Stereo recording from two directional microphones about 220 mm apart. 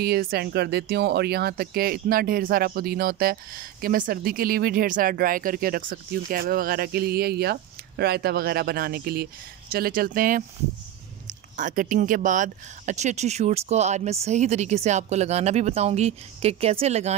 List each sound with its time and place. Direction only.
0.0 s speech: 45° right (ahead or behind)
11.5 s speech: 35° right (ahead or behind)